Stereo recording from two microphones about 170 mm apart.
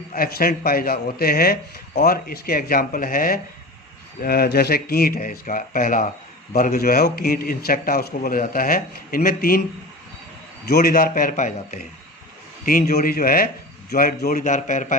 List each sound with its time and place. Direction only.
0.1 s a man's voice: 60° left (ahead or behind)
10.7 s a man's voice: 65° left (ahead or behind); by 11.9 s 45° left (ahead or behind)
12.6 s a man's voice: 55° left (ahead or behind)